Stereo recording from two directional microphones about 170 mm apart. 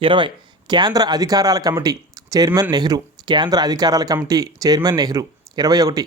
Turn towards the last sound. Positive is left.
turn(degrees=-20)  # may be behind; listen again after turning